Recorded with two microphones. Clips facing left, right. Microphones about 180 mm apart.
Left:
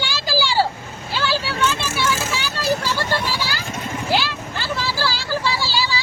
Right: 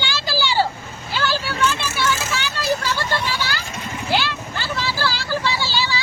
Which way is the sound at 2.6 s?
35° left (ahead or behind).